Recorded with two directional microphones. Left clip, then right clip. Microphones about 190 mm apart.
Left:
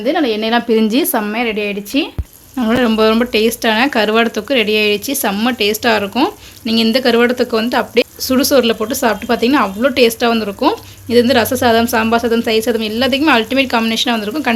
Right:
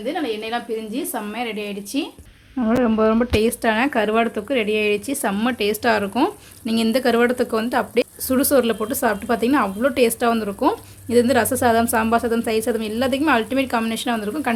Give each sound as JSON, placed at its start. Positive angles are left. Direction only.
{"t": 0.0, "sound": "a woman's voice", "side_deg": 50}
{"t": 1.2, "sound": "speech", "side_deg": 20}